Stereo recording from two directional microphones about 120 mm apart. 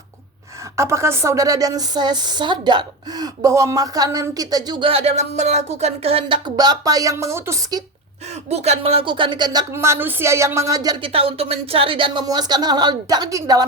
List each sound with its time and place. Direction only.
0.8 s a woman's voice: 25° right (ahead or behind)
4.9 s speech: 60° right (ahead or behind); by 7.6 s 25° right (ahead or behind)
8.4 s speech: 65° right (ahead or behind); by 9.6 s 35° right (ahead or behind)
9.7 s speech: 20° right (ahead or behind)
11.0 s a woman's voice: 50° right (ahead or behind); by 13.7 s 30° right (ahead or behind)